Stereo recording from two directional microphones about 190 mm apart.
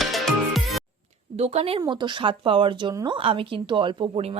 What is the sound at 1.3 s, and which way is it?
A woman's voice, 35° right (ahead or behind).